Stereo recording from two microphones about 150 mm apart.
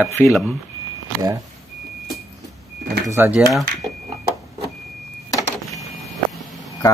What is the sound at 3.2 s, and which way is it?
Speech, 10° right (ahead or behind).